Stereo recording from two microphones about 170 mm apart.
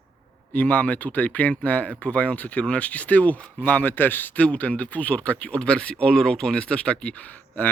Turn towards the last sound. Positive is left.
turn(degrees=10)  # may be behind; listen again after turning